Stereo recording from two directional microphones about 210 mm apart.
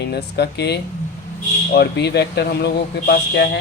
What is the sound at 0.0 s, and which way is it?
Speech, 50° left (ahead or behind).